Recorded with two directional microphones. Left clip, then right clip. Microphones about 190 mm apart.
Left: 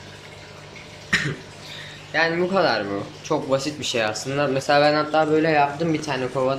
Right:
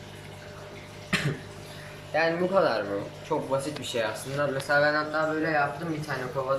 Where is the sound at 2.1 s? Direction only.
Centre (ahead or behind); by 6.0 s 20° left (ahead or behind).